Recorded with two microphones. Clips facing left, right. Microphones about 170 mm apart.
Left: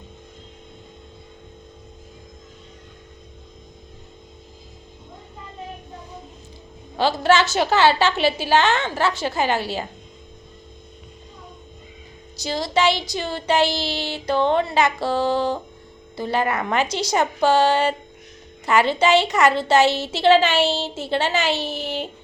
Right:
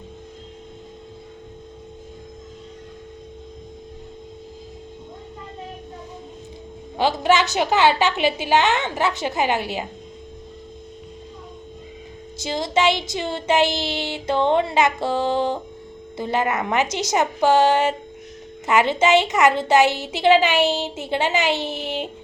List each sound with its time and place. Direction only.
6.9 s a woman's voice: 15° right (ahead or behind)
12.4 s a sound: 20° right (ahead or behind)
16.1 s a woman's voice: 20° right (ahead or behind)